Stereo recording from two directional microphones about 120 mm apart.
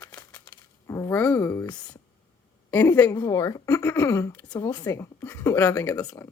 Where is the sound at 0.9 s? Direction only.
30° left (ahead or behind).